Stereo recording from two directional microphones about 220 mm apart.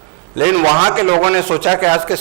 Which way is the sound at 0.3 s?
15° right (ahead or behind).